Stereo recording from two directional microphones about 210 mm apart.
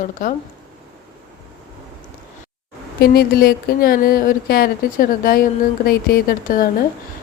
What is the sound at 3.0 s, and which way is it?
A woman's voice, 45° left (ahead or behind).